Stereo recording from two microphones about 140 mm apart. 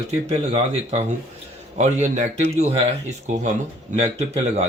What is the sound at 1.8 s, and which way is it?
A man's voice, 60° right (ahead or behind).